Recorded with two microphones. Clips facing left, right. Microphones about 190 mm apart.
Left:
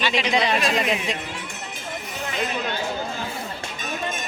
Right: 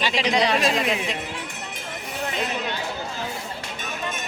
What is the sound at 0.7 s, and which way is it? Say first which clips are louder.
Speech: left 1 dB; centre (ahead or behind).